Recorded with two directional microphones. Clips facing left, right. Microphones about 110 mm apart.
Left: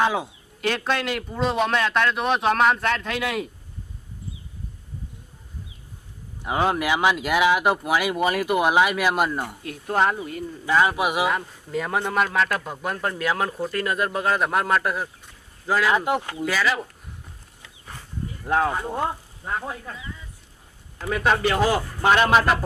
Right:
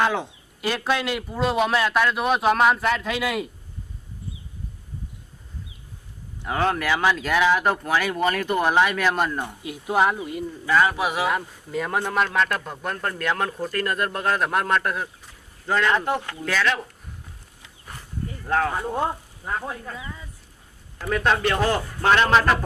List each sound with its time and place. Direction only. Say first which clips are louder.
0.0 s speech: even; 5° left (ahead or behind)
0.6 s speech: even; 5° right (ahead or behind)
6.4 s speech: left 1 dB; 15° left (ahead or behind)
9.6 s speech: right 1 dB; 5° right (ahead or behind)
10.7 s speech: even; 20° left (ahead or behind)
11.3 s speech: even; centre (ahead or behind); by 16.5 s 15° left (ahead or behind)
16.5 s speech: even; 5° left (ahead or behind)
18.4 s speech: left 1 dB; 20° left (ahead or behind)
18.9 s speech: right 1 dB; 5° right (ahead or behind)
21.1 s speech: even; 5° left (ahead or behind)